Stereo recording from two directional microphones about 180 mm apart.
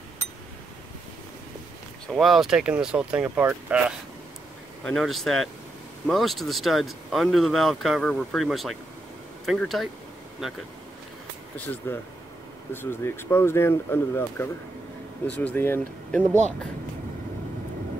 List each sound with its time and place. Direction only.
2.1 s speech: centre (ahead or behind)
4.8 s speech: centre (ahead or behind)
11.5 s speech: 10° left (ahead or behind)